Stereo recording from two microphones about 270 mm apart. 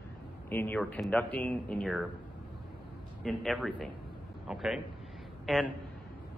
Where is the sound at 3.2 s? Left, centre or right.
Centre.